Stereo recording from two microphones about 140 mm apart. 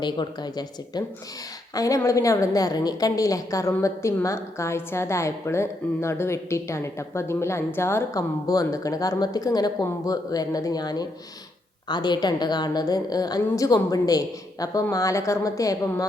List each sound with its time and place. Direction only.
0.0 s a woman's voice: 30° left (ahead or behind)